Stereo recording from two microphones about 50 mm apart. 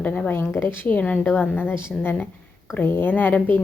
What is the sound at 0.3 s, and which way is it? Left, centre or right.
A woman's voice, left.